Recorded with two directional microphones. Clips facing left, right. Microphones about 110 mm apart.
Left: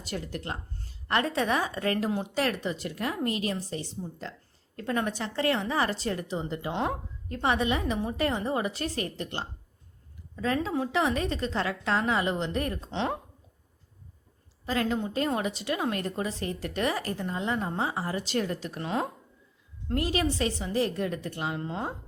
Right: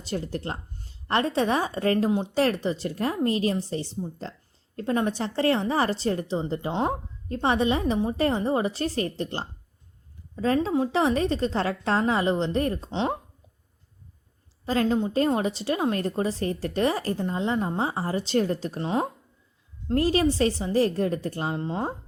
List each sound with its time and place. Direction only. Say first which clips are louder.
0.0 s a woman's voice: right 5 dB; 30° right (ahead or behind)
2.0 s a woman's voice: right 5 dB; 20° right (ahead or behind)
2.3 s a woman's voice: right 5 dB; 30° right (ahead or behind)
12.9 s a woman's voice: right 3 dB; 20° right (ahead or behind)
14.7 s a woman's voice: right 5 dB; 30° right (ahead or behind)